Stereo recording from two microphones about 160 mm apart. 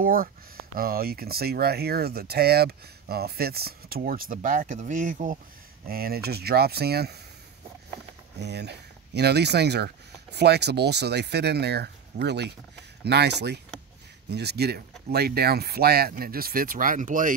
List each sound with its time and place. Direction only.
0.0 s speech: 60° right (ahead or behind)
5.9 s speech: 70° right (ahead or behind)
8.4 s speech: 90° right; by 17.3 s 55° right (ahead or behind)